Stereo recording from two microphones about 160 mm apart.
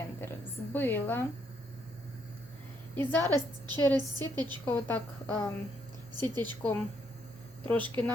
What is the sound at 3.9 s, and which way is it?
Speech, 25° right (ahead or behind).